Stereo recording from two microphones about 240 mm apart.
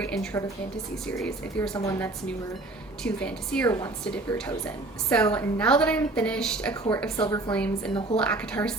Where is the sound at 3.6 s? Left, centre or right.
Centre.